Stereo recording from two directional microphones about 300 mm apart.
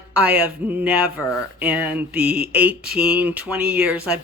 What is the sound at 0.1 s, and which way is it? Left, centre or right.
Speech, centre.